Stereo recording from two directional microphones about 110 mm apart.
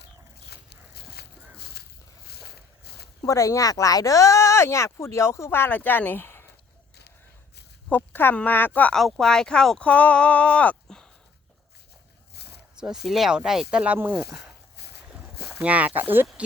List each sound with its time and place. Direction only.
3.2 s speech: 30° left (ahead or behind)
7.9 s speech: 15° left (ahead or behind)
9.0 s speech: centre (ahead or behind)
12.8 s speech: 5° right (ahead or behind)
15.6 s speech: 15° right (ahead or behind)